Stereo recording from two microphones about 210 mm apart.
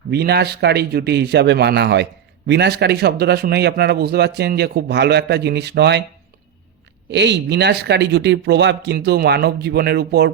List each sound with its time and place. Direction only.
0.1 s a man's voice: 50° right (ahead or behind)
7.1 s a man's voice: 55° right (ahead or behind)